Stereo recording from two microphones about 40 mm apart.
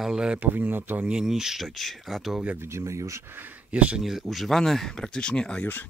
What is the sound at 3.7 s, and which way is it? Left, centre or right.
Speech, right.